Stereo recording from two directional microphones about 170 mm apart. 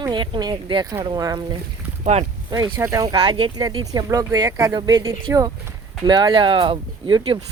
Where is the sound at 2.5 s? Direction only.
20° right (ahead or behind).